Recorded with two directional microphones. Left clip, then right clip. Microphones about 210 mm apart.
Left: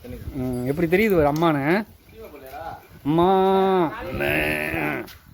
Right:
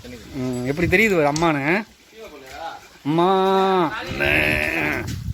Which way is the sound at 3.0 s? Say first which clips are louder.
Even; centre (ahead or behind).